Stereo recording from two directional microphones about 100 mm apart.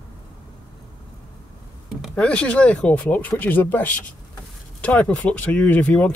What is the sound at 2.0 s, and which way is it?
Speech, 5° left (ahead or behind).